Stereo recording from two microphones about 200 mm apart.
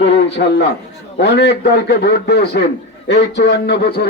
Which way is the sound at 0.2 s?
55° left (ahead or behind).